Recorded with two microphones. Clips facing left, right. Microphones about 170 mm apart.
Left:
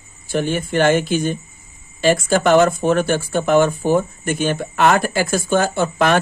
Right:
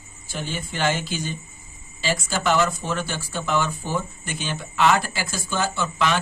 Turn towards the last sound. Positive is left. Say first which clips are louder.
# left 7 dB
turn(degrees=55)  # may be behind; listen again after turning